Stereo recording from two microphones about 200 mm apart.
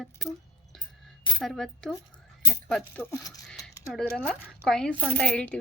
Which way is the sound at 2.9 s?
10° left (ahead or behind).